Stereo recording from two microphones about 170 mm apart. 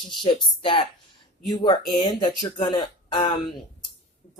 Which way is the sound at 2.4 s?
25° left (ahead or behind).